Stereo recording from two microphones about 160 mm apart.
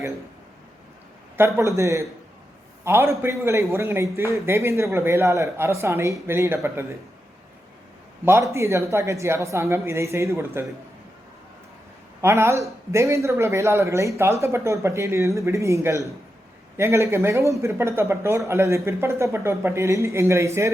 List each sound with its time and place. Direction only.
1.4 s speech: 15° right (ahead or behind)
8.2 s speech: 15° right (ahead or behind)
12.2 s speech: 15° right (ahead or behind)